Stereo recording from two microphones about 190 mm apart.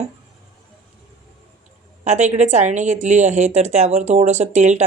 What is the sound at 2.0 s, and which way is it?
A woman's voice, 35° right (ahead or behind).